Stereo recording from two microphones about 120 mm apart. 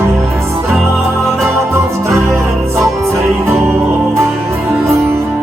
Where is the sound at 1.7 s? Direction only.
20° right (ahead or behind).